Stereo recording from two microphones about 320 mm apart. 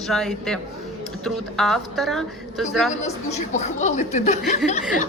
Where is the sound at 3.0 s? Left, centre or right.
Left.